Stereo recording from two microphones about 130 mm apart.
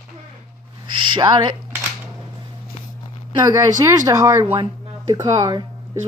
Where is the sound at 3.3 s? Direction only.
30° right (ahead or behind).